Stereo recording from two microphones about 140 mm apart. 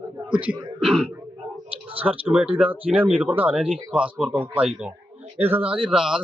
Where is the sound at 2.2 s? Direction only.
5° right (ahead or behind).